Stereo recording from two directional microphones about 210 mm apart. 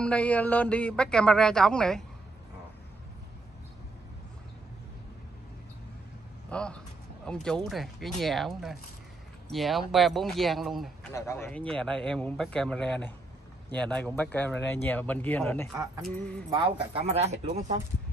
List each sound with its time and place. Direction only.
0.0 s a man's voice: 5° left (ahead or behind)
6.5 s a man's voice: 5° left (ahead or behind)
11.1 s a man's voice: 10° left (ahead or behind)
16.4 s speech: 20° right (ahead or behind)